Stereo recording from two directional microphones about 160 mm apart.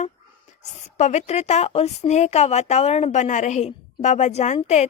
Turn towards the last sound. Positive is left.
turn(degrees=45)  # may be behind; listen again after turning